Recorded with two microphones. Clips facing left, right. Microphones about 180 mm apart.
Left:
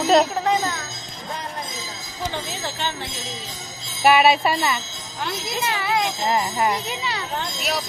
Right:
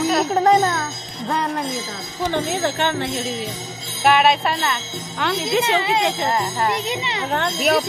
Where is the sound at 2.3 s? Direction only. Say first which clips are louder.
Right 9 dB; 60° right (ahead or behind).